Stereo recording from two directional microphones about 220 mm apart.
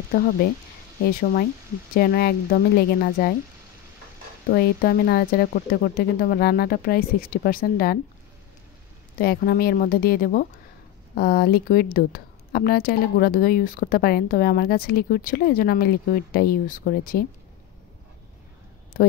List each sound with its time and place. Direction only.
2.0 s a woman's voice: 45° left (ahead or behind)
4.5 s a woman's voice: 45° left (ahead or behind)
9.2 s a woman's voice: 45° left (ahead or behind)